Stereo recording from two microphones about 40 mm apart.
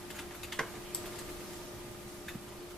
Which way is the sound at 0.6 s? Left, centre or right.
Centre.